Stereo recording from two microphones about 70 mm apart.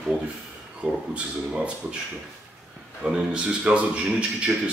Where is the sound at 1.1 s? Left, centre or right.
Centre.